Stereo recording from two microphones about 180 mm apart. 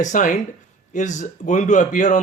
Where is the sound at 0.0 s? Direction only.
45° left (ahead or behind).